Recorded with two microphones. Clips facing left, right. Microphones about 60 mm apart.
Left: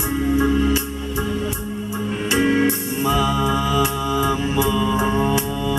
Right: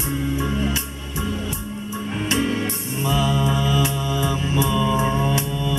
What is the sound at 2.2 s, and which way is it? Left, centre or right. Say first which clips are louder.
Music: left 6 dB; left.